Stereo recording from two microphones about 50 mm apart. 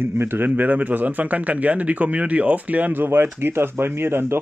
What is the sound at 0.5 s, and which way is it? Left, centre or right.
A man's voice, right.